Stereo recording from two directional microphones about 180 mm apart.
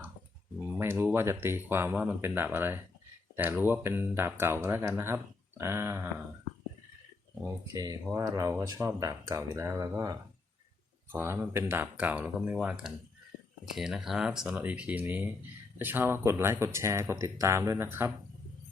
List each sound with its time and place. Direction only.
0.7 s speech: 15° right (ahead or behind)
7.4 s speech: 20° right (ahead or behind)